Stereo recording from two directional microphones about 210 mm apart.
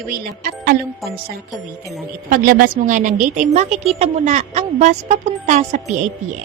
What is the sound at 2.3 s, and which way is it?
A woman's voice, 40° right (ahead or behind).